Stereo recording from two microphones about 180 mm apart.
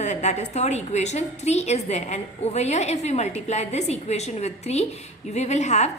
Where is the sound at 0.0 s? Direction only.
40° left (ahead or behind).